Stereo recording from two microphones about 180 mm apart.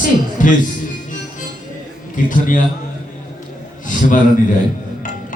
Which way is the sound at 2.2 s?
45° left (ahead or behind).